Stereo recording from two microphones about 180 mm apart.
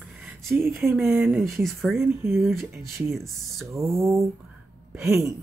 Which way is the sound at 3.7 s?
15° right (ahead or behind).